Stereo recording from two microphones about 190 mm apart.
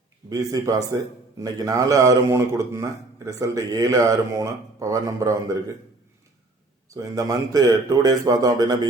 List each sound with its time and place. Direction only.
0.3 s a man's voice: 20° right (ahead or behind)
6.9 s a man's voice: 15° right (ahead or behind)